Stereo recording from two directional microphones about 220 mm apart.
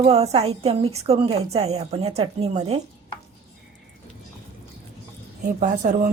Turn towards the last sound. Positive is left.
turn(degrees=-30)  # may be behind; listen again after turning